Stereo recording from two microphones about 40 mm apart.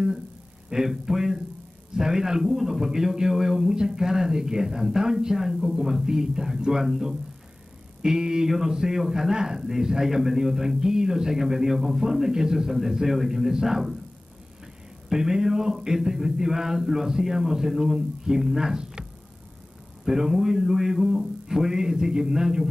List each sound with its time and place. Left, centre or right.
0.7 s a man's voice: centre
15.0 s a man's voice: centre
20.1 s a man's voice: centre